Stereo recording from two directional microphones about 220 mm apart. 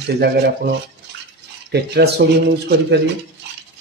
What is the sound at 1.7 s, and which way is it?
Speech, 50° right (ahead or behind).